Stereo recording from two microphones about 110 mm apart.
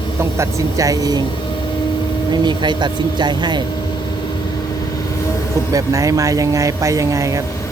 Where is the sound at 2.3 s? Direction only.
45° right (ahead or behind).